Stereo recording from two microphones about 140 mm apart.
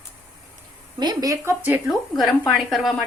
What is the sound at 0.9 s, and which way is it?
Speech, 30° right (ahead or behind).